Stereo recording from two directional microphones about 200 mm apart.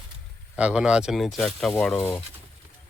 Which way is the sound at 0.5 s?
5° right (ahead or behind).